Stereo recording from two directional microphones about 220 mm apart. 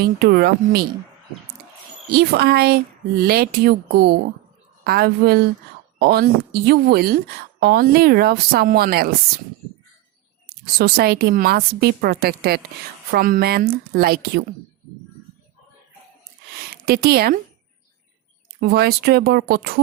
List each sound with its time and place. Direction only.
0.0 s speech: 45° right (ahead or behind)
2.1 s speech: 45° right (ahead or behind)
10.8 s speech: 45° right (ahead or behind)
16.8 s speech: 45° right (ahead or behind)
18.6 s speech: 45° right (ahead or behind)